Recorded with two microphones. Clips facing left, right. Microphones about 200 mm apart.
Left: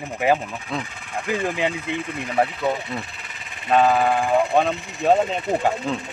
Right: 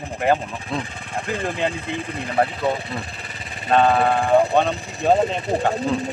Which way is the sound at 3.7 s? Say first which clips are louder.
Right 1 dB; 5° left (ahead or behind).